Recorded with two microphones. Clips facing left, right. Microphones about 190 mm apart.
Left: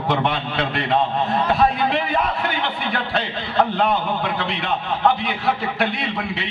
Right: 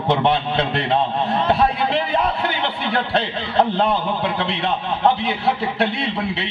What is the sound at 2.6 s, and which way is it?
A man's voice, 30° right (ahead or behind).